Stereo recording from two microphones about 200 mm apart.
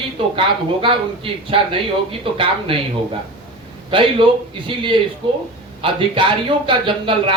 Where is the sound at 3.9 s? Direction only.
25° right (ahead or behind).